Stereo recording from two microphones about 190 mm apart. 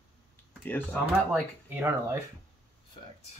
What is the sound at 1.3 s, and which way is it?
Speech, 10° right (ahead or behind).